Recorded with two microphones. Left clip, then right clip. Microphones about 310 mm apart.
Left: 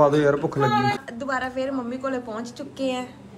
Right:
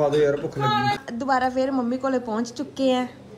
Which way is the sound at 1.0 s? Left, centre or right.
Centre.